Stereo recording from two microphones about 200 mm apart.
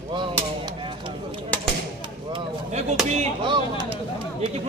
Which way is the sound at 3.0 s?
30° right (ahead or behind).